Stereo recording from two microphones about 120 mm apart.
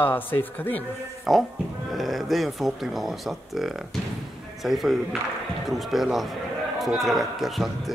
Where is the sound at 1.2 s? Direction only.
Centre (ahead or behind).